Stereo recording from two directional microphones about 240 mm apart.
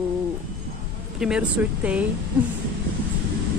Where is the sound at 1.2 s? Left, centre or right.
Centre.